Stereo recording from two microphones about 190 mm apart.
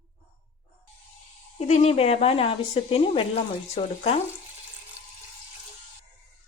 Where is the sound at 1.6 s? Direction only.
35° left (ahead or behind).